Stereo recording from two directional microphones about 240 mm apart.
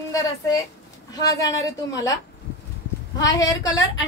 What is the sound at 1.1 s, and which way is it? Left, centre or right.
Speech, centre.